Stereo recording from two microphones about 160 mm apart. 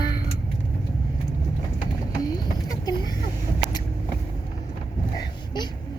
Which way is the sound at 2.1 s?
25° left (ahead or behind).